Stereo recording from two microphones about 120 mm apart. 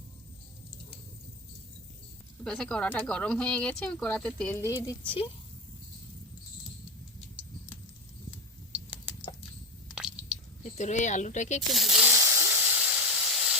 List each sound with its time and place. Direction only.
2.4 s speech: 5° left (ahead or behind)
4.5 s speech: 25° left (ahead or behind)
4.8 s speech: 40° left (ahead or behind)
8.7 s typing: 10° right (ahead or behind)
9.9 s squish: 5° right (ahead or behind)
10.6 s speech: 75° left (ahead or behind)
11.7 s a sound: centre (ahead or behind)
12.0 s hiss: 20° right (ahead or behind)